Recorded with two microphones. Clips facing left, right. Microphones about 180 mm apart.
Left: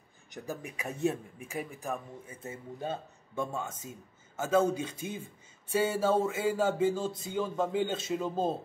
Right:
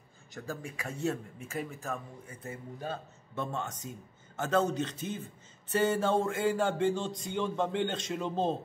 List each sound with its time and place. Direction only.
0.3 s speech: 15° left (ahead or behind)